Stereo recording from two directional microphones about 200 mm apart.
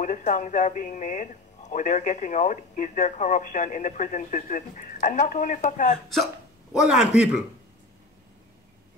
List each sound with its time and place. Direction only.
0.0 s speech: 40° left (ahead or behind)
6.7 s a man's voice: 5° right (ahead or behind)